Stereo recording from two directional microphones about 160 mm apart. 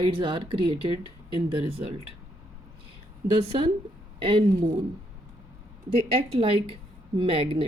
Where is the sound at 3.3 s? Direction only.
35° right (ahead or behind).